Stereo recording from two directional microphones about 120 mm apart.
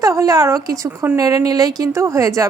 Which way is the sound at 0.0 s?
30° right (ahead or behind).